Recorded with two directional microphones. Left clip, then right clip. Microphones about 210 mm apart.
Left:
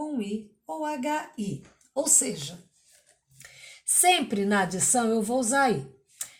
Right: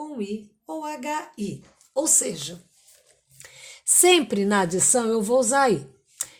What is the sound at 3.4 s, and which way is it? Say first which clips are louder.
A woman's voice: right 3 dB; 45° right (ahead or behind).